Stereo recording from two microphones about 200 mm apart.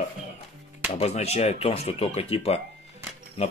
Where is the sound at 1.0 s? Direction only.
30° left (ahead or behind).